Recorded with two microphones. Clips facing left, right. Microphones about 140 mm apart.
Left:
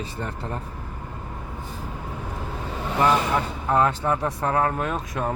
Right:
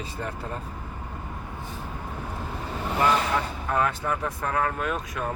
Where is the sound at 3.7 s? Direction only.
30° left (ahead or behind).